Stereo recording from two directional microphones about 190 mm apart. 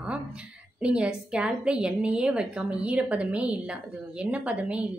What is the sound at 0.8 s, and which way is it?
A woman's voice, 5° right (ahead or behind).